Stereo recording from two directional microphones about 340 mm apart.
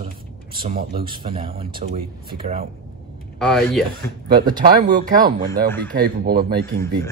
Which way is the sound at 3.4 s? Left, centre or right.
Centre.